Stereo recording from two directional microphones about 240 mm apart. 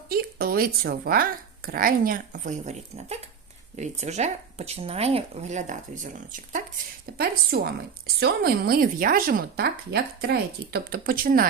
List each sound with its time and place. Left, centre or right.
0.1 s a woman's voice: right